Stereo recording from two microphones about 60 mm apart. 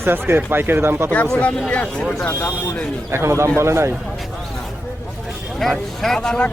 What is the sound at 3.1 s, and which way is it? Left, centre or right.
Speech, right.